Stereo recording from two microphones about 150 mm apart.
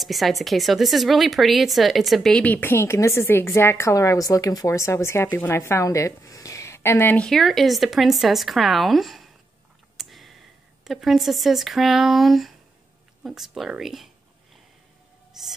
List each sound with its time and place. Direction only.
0.0 s speech: centre (ahead or behind)
7.2 s speech: centre (ahead or behind)
15.3 s a sound: centre (ahead or behind)